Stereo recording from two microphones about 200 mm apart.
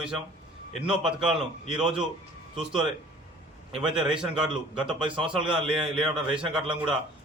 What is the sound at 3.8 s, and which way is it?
A man's voice, 5° right (ahead or behind).